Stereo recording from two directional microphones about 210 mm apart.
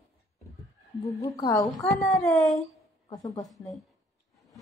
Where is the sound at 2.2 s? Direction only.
Centre (ahead or behind).